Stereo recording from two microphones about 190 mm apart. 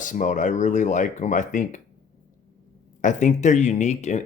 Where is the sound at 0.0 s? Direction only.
40° left (ahead or behind).